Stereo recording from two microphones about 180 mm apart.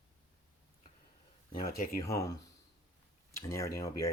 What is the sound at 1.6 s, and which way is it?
Speech, 50° left (ahead or behind).